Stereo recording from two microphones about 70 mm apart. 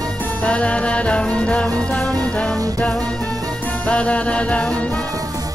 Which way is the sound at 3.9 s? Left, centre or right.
Centre.